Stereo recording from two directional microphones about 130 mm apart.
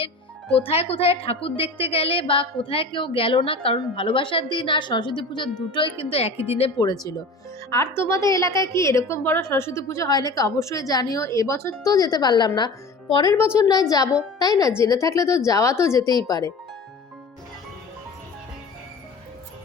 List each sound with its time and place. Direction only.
0.6 s a woman's voice: 50° left (ahead or behind)
6.7 s a woman's voice: 30° left (ahead or behind)
13.3 s a woman's voice: 20° left (ahead or behind)